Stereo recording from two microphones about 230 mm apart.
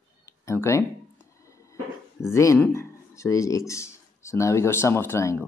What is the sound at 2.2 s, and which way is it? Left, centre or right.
Speech, centre.